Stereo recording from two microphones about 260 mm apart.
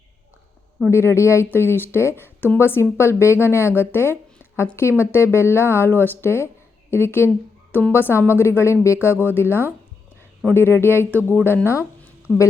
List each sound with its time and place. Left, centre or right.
0.9 s a woman's voice: centre